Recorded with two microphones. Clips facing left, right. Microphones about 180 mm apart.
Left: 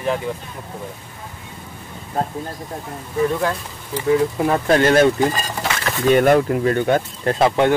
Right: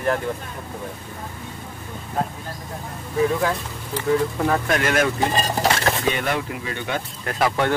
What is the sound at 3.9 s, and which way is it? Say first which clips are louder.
Speech: left 3 dB; 20° left (ahead or behind).